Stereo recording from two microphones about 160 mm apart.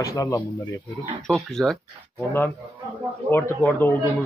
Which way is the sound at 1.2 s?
Centre (ahead or behind).